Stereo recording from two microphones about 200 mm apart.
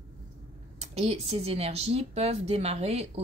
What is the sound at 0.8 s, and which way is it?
Speech, 30° right (ahead or behind).